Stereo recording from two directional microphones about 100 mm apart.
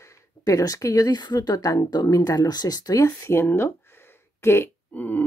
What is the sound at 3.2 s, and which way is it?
Speech, 25° left (ahead or behind).